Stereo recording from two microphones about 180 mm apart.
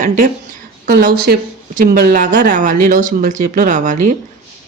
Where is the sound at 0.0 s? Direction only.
50° right (ahead or behind).